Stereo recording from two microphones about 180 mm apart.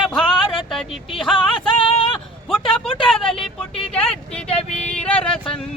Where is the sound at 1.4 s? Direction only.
30° left (ahead or behind).